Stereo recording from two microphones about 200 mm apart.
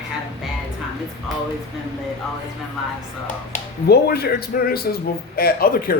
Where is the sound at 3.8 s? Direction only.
55° left (ahead or behind).